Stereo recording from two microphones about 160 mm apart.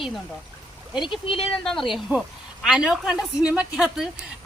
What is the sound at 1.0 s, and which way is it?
Speech, 35° left (ahead or behind).